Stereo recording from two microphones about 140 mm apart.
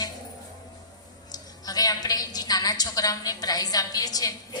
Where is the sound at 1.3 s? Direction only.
30° left (ahead or behind).